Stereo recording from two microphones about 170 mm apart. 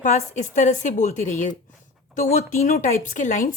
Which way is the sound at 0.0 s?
45° left (ahead or behind).